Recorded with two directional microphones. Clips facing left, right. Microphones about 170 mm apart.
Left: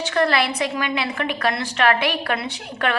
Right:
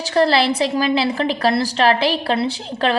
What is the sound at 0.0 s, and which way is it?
A woman's voice, 30° right (ahead or behind).